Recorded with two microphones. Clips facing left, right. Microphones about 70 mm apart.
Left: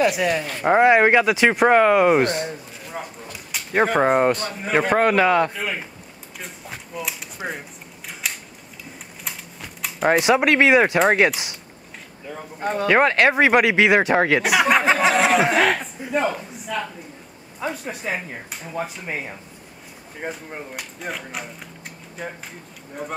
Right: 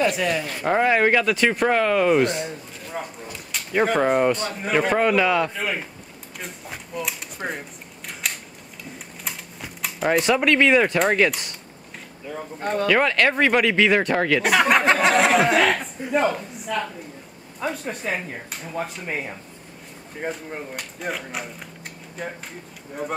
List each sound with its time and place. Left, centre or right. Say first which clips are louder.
0.0 s speech: left 2 dB; centre
2.2 s a sound: left 1 dB; centre
4.3 s speech: left 1 dB; centre
4.9 s a man's voice: left 4 dB; left
5.5 s speech: right 1 dB; centre
8.1 s camera: even; centre
9.2 s typing: even; centre
10.3 s speech: left 1 dB; centre
12.8 s a man's voice: left 3 dB; left
13.1 s speech: left 3 dB; centre
14.4 s speech: even; centre